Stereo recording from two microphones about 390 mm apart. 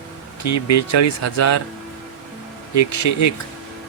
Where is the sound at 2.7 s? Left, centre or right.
Left.